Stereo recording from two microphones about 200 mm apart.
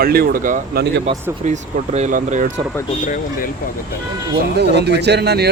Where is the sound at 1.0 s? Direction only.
35° right (ahead or behind).